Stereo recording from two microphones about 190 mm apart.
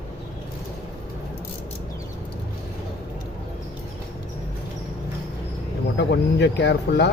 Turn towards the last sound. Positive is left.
turn(degrees=60)  # may be behind; listen again after turning